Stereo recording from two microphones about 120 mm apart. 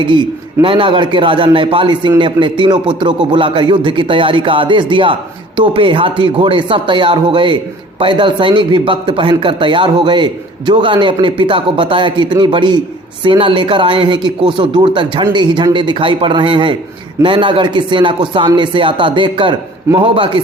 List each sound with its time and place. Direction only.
0.0 s a man's voice: 45° right (ahead or behind)